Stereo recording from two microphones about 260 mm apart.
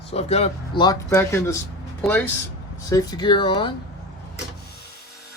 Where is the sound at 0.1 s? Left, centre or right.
Left.